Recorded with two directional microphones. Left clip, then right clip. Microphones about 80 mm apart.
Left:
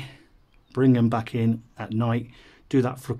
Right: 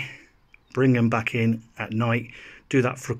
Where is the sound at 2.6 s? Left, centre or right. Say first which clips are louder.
Right 1 dB; centre.